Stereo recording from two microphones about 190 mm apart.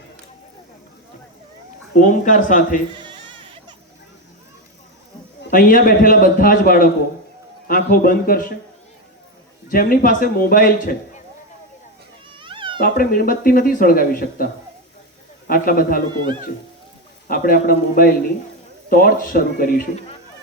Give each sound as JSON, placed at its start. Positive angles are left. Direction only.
{"t": 2.0, "sound": "speech", "side_deg": 45}
{"t": 2.9, "sound": "music", "side_deg": -25}
{"t": 5.5, "sound": "speech", "side_deg": 45}
{"t": 9.6, "sound": "speech", "side_deg": 50}
{"t": 12.4, "sound": "cat", "side_deg": -25}
{"t": 12.8, "sound": "speech", "side_deg": 55}
{"t": 17.2, "sound": "speech", "side_deg": 50}